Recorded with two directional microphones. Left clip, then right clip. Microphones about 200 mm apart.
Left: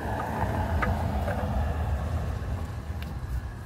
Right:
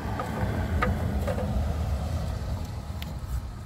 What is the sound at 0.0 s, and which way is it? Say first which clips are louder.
Vehicle: left 2 dB; 45° right (ahead or behind).